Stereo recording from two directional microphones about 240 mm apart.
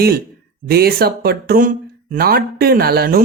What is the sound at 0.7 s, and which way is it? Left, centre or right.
Speech, right.